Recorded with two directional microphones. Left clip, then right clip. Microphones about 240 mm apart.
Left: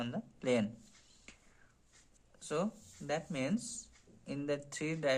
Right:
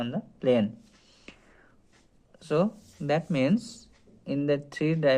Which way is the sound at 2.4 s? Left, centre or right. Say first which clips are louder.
Right 11 dB; right.